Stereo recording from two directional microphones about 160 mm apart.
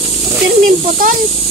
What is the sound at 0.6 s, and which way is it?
Speech, 60° right (ahead or behind).